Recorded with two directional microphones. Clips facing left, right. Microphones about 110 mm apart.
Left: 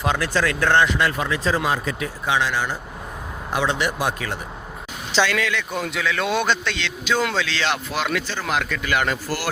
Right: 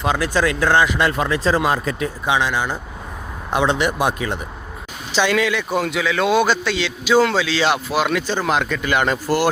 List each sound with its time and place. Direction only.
0.2 s a man's voice: 15° right (ahead or behind)
1.2 s speech: 35° right (ahead or behind)
1.6 s speech: 50° right (ahead or behind)
2.2 s a man's voice: 15° right (ahead or behind)